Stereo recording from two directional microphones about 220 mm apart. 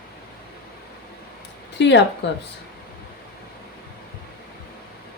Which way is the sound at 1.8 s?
55° left (ahead or behind).